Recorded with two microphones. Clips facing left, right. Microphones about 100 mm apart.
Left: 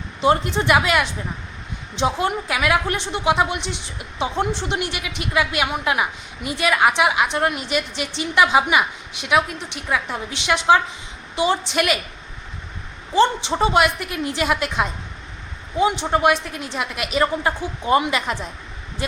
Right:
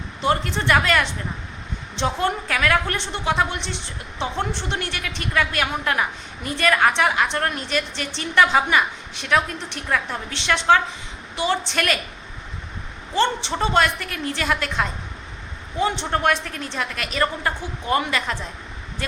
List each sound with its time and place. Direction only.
0.2 s a woman's voice: 20° left (ahead or behind)
13.1 s a woman's voice: 15° left (ahead or behind)